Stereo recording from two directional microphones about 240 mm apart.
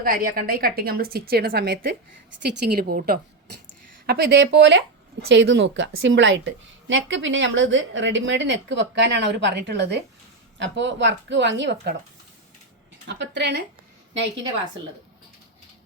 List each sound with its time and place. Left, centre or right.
0.0 s a woman's voice: right
13.1 s a woman's voice: right